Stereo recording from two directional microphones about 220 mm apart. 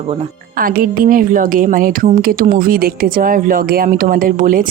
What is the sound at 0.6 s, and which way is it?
A woman's voice, 40° right (ahead or behind).